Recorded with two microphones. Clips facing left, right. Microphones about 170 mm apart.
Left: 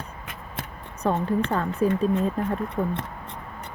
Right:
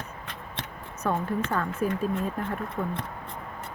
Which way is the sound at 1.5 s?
30° left (ahead or behind).